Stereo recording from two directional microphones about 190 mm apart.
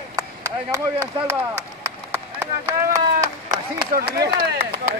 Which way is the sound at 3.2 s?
20° right (ahead or behind).